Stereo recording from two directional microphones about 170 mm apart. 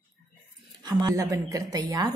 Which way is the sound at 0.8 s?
20° right (ahead or behind).